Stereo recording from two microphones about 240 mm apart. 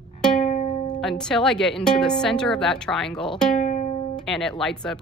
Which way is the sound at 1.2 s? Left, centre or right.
Centre.